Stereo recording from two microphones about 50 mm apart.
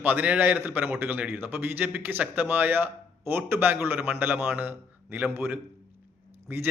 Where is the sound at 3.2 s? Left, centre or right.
Right.